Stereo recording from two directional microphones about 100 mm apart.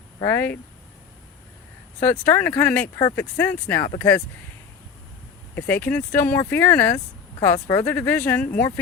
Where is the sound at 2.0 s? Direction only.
20° left (ahead or behind).